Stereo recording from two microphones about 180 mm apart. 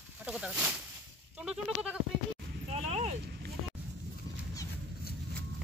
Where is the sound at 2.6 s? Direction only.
35° right (ahead or behind).